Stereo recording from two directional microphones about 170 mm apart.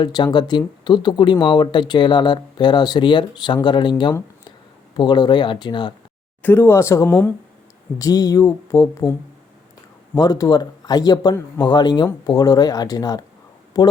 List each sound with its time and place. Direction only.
0.0 s speech: 25° left (ahead or behind)
6.4 s speech: 15° left (ahead or behind)
10.2 s speech: 20° left (ahead or behind)